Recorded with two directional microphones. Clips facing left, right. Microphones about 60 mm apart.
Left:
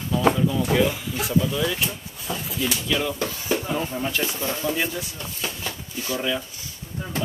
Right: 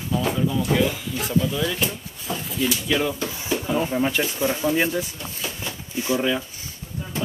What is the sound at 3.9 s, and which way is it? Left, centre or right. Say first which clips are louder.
Speech: right 4 dB; right.